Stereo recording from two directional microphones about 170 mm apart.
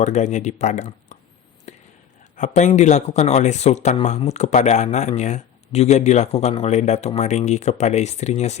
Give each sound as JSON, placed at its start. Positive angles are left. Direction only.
{"t": 0.0, "sound": "speech", "side_deg": 45}
{"t": 1.7, "sound": "whispering", "side_deg": 40}
{"t": 2.3, "sound": "speech", "side_deg": 45}